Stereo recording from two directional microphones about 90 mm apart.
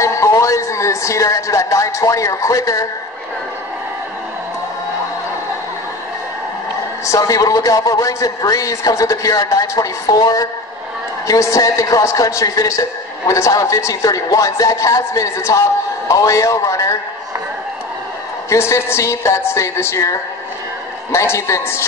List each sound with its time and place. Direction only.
0.0 s speech: 35° left (ahead or behind)
7.1 s a man's voice: 40° left (ahead or behind)
18.5 s a man's voice: 30° left (ahead or behind)